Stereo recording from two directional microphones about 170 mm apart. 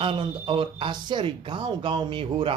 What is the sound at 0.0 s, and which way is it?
Speech, 30° right (ahead or behind).